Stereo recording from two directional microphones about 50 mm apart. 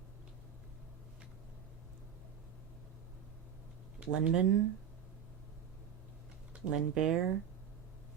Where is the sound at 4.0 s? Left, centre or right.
Centre.